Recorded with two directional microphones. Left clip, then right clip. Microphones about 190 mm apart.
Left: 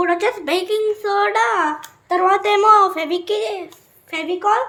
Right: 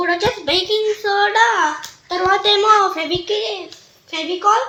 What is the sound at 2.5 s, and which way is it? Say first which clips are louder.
A woman's voice: left 2 dB; 25° left (ahead or behind).